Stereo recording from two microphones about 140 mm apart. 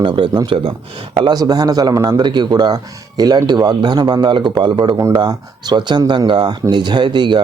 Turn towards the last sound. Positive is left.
turn(degrees=-35)  # may be behind; listen again after turning